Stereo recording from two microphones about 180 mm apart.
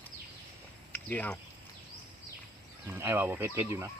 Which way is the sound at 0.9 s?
10° left (ahead or behind).